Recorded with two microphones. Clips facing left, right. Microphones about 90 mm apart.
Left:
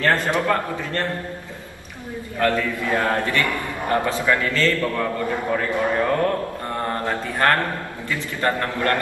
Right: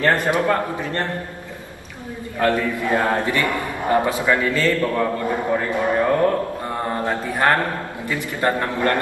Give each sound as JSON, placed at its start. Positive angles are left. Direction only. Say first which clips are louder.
{"t": 0.0, "sound": "a man's voice", "louder": "right 2 dB", "side_deg": -15}
{"t": 2.3, "sound": "a man's voice", "louder": "right 2 dB", "side_deg": -20}